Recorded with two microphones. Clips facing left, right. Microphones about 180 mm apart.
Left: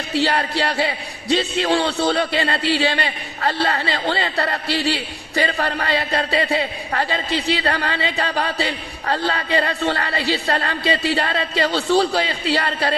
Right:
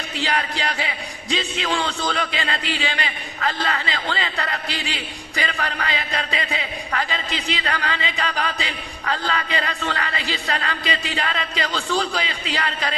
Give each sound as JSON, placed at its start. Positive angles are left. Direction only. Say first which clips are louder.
{"t": 0.1, "sound": "a man's voice", "louder": "left 6 dB", "side_deg": 35}